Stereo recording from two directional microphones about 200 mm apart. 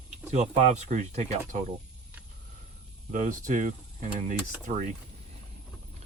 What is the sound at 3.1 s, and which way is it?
Speech, 40° right (ahead or behind).